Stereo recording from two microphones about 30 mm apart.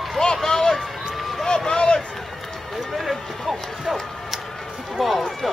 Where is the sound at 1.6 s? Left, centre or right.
Left.